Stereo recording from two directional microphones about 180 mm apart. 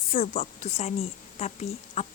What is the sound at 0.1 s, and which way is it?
Speech, 45° left (ahead or behind).